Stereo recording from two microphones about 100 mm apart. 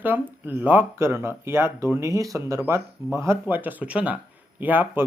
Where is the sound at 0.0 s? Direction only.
20° right (ahead or behind).